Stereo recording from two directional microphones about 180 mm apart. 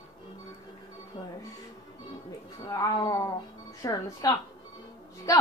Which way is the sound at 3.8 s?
20° left (ahead or behind).